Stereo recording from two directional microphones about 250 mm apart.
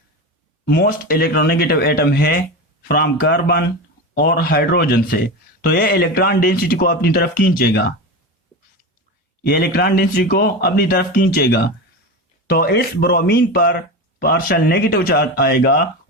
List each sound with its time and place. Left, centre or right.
0.6 s speech: left
9.5 s speech: left